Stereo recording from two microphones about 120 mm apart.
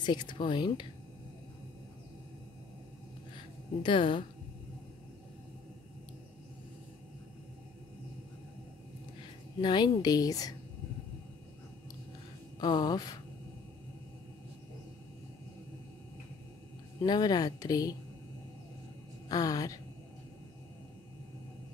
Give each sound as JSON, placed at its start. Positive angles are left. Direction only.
{"t": 0.0, "sound": "speech", "side_deg": 40}
{"t": 3.3, "sound": "a sound", "side_deg": 45}
{"t": 9.6, "sound": "speech", "side_deg": 40}
{"t": 12.5, "sound": "speech", "side_deg": 35}
{"t": 17.0, "sound": "speech", "side_deg": 35}
{"t": 19.2, "sound": "speech", "side_deg": 30}